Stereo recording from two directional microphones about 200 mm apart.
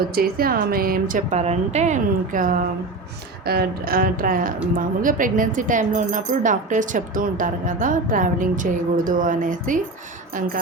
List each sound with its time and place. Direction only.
0.1 s a woman's voice: 50° right (ahead or behind)